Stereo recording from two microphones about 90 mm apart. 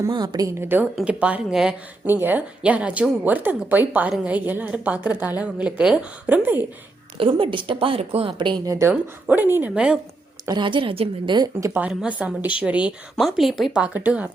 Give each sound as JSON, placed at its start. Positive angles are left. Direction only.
{"t": 0.1, "sound": "a woman's voice", "side_deg": -60}
{"t": 0.4, "sound": "speech", "side_deg": -25}
{"t": 1.0, "sound": "a woman's voice", "side_deg": -15}
{"t": 2.0, "sound": "a woman's voice", "side_deg": -20}
{"t": 7.2, "sound": "a woman's voice", "side_deg": -75}
{"t": 8.6, "sound": "a woman's voice", "side_deg": -35}
{"t": 8.9, "sound": "speech", "side_deg": -20}
{"t": 9.7, "sound": "a woman's voice", "side_deg": -10}
{"t": 10.5, "sound": "a woman's voice", "side_deg": -65}
{"t": 11.9, "sound": "a woman's voice", "side_deg": -10}
{"t": 13.1, "sound": "a woman's voice", "side_deg": 0}